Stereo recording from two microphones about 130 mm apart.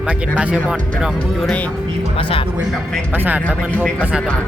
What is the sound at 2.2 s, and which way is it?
Speech, 45° left (ahead or behind).